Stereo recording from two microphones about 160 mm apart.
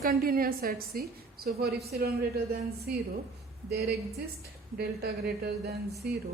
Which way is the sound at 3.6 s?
85° right.